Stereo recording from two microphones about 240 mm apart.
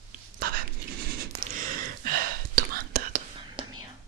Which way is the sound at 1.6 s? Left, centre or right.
Right.